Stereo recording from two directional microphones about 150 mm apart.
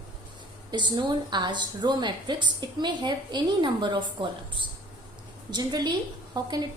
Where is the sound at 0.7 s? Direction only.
30° right (ahead or behind).